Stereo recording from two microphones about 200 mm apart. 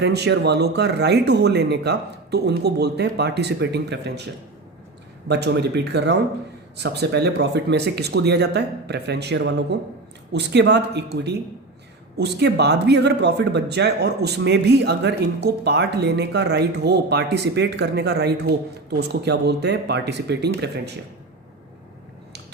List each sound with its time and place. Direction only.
0.0 s speech: 55° right (ahead or behind)
5.3 s speech: 55° right (ahead or behind)